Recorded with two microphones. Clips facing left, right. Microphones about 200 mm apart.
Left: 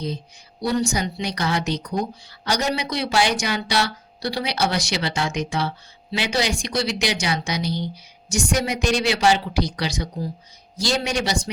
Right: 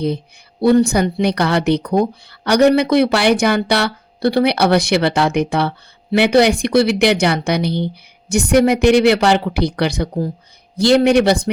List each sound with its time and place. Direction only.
0.6 s speech: 55° right (ahead or behind)